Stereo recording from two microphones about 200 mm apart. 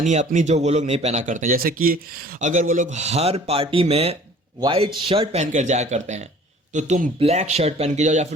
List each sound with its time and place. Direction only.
0.0 s speech: 35° right (ahead or behind)